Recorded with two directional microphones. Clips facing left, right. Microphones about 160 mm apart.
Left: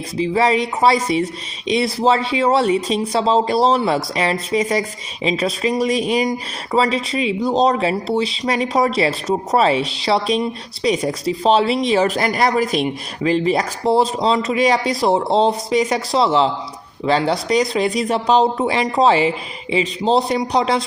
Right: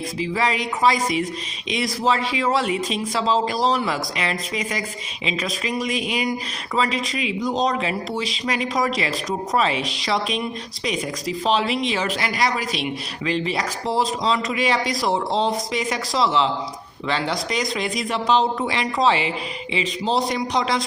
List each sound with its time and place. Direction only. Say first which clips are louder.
0.2 s speech: left 7 dB; 30° left (ahead or behind)